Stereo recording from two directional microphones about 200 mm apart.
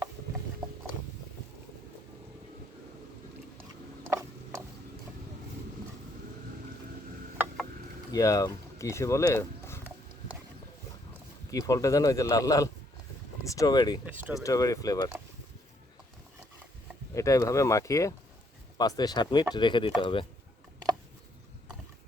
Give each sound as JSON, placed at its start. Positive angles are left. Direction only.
{"t": 8.1, "sound": "speech", "side_deg": 15}
{"t": 11.5, "sound": "speech", "side_deg": 15}
{"t": 14.0, "sound": "speech", "side_deg": -10}
{"t": 14.4, "sound": "speech", "side_deg": 15}
{"t": 17.2, "sound": "speech", "side_deg": 15}